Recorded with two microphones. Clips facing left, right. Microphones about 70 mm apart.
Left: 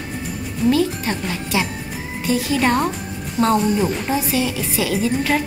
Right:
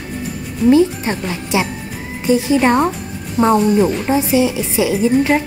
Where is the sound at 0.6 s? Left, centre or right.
Right.